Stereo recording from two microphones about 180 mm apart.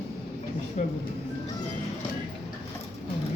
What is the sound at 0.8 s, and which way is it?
Speech, 45° left (ahead or behind).